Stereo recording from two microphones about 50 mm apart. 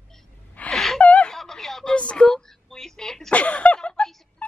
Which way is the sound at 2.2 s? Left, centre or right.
Centre.